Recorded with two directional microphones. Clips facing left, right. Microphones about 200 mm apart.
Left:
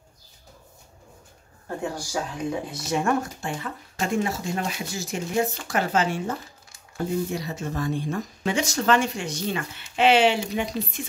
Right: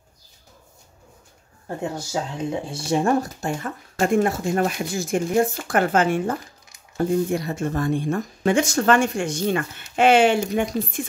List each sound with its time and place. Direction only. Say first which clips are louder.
1.8 s speech: right 2 dB; 25° right (ahead or behind); by 11.0 s 50° right (ahead or behind)